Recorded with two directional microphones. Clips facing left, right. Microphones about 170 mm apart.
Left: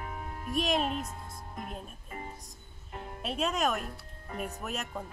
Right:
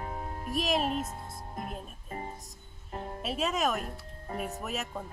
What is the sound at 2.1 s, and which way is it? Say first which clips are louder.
Music: right 4 dB; 30° right (ahead or behind).